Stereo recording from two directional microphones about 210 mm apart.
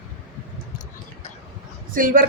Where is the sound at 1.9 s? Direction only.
40° right (ahead or behind).